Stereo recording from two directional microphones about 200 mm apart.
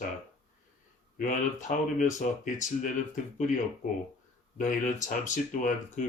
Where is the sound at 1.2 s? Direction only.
40° left (ahead or behind).